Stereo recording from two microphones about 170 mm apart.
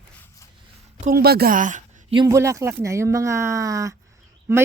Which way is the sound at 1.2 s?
70° right (ahead or behind).